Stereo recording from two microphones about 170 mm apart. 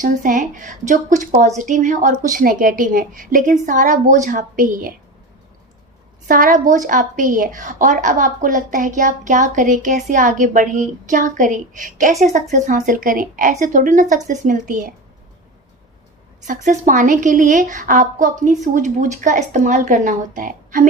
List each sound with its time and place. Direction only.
0.0 s a woman's voice: 50° right (ahead or behind)
6.2 s a woman's voice: 50° right (ahead or behind)
16.5 s a woman's voice: 45° right (ahead or behind)